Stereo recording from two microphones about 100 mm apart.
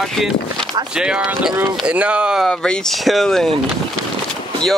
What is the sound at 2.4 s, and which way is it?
Speech, 5° left (ahead or behind).